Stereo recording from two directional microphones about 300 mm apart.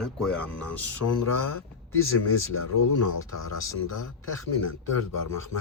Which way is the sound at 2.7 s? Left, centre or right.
Left.